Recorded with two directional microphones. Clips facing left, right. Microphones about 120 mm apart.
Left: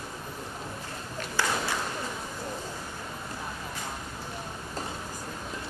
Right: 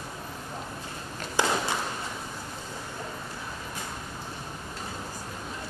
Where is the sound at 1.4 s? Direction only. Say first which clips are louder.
Right 3 dB; 20° right (ahead or behind).